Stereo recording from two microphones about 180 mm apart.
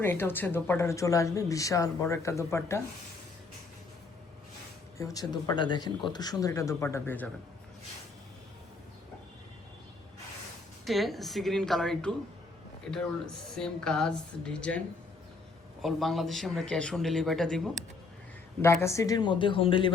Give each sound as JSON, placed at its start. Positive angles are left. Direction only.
{"t": 0.0, "sound": "speech", "side_deg": 10}
{"t": 4.9, "sound": "speech", "side_deg": 20}
{"t": 10.8, "sound": "speech", "side_deg": 0}
{"t": 15.8, "sound": "speech", "side_deg": 0}
{"t": 18.6, "sound": "speech", "side_deg": 15}